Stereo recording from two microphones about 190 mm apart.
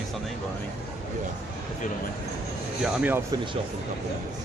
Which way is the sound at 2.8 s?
10° right (ahead or behind).